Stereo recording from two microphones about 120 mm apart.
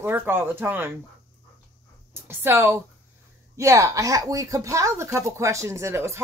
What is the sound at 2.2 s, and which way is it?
Speech, 20° right (ahead or behind).